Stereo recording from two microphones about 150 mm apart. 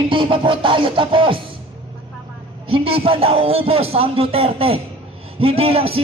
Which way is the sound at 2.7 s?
40° right (ahead or behind).